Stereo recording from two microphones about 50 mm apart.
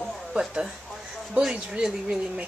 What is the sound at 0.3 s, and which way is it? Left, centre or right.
A woman's voice, centre.